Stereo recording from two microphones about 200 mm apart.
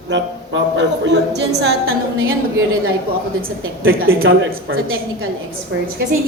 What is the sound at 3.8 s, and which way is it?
Speech, 85° right.